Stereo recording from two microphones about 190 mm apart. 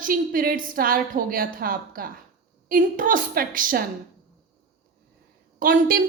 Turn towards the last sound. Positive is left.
turn(degrees=-50)  # may be behind; listen again after turning